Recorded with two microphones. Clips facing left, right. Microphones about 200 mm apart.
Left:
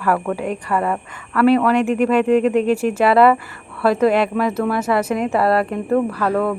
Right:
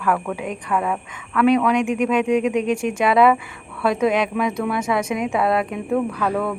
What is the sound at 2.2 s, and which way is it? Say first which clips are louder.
Speech: left 4 dB; 10° right (ahead or behind).